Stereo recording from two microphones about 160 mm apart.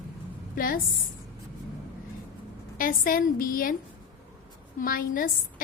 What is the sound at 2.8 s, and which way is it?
Speech, 60° left (ahead or behind).